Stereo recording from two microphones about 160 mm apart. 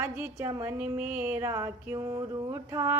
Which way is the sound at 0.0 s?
15° right (ahead or behind).